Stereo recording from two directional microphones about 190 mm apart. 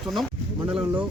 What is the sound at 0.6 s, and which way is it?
Speech, 25° right (ahead or behind).